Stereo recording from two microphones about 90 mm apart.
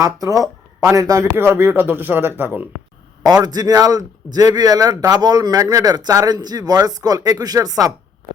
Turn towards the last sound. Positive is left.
turn(degrees=-45)  # may be behind; listen again after turning